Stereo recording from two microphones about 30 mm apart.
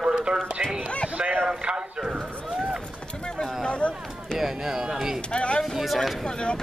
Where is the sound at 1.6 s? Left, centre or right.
Right.